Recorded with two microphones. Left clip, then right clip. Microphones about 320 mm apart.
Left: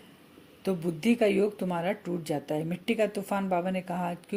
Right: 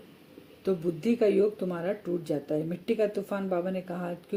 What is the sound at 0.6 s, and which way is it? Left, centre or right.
Speech, left.